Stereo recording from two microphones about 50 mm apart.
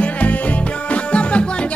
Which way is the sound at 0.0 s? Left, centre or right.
Left.